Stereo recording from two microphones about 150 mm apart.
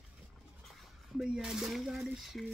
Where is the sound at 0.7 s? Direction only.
Centre (ahead or behind).